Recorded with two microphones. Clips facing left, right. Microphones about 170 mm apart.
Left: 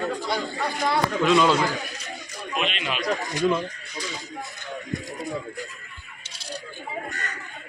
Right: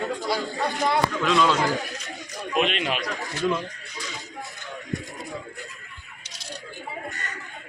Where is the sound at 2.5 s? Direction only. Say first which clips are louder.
Right 4 dB; 50° right (ahead or behind).